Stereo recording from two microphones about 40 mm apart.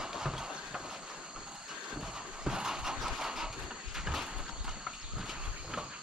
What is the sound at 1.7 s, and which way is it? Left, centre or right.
Vehicle, centre.